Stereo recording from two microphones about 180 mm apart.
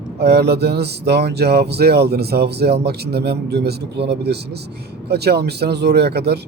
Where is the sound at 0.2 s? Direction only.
65° right (ahead or behind).